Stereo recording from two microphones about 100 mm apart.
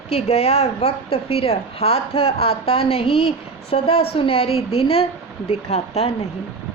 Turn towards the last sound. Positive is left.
turn(degrees=80)